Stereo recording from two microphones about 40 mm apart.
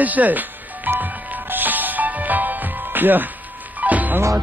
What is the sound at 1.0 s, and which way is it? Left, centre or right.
Music, right.